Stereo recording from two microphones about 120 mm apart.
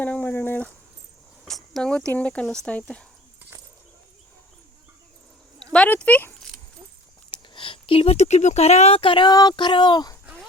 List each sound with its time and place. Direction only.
0.0 s dog: 15° left (ahead or behind)
1.5 s speech: 5° left (ahead or behind)
5.7 s speech: 10° left (ahead or behind)
7.3 s speech: 45° left (ahead or behind)